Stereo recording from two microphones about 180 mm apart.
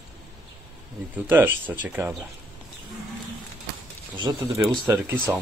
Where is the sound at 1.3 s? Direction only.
10° right (ahead or behind).